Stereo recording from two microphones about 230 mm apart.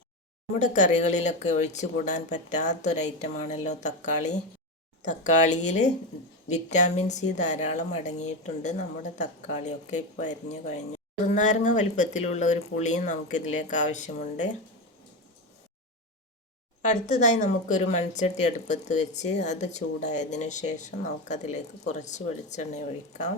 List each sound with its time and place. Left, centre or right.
0.6 s speech: left
16.9 s speech: left